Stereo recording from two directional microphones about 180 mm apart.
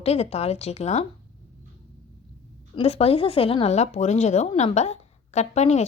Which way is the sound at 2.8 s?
35° left (ahead or behind).